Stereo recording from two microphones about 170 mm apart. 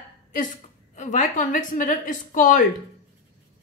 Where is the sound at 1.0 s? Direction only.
45° left (ahead or behind).